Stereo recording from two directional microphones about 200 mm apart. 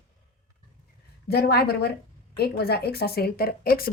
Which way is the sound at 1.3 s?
50° left (ahead or behind).